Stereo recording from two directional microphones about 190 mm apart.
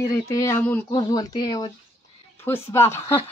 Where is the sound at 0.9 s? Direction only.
20° left (ahead or behind).